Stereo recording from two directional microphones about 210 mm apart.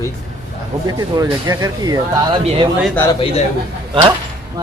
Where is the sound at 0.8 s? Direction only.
15° right (ahead or behind).